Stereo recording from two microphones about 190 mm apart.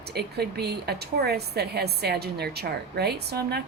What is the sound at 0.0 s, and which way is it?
A woman's voice, 60° right (ahead or behind).